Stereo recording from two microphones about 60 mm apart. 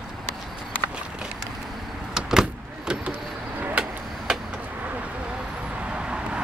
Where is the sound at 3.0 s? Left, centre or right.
Right.